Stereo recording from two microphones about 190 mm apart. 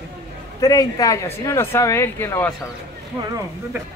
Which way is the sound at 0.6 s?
20° left (ahead or behind).